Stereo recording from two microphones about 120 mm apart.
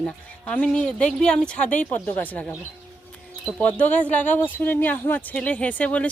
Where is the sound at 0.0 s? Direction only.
10° left (ahead or behind).